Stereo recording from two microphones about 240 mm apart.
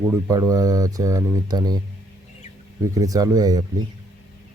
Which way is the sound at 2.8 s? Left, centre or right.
Centre.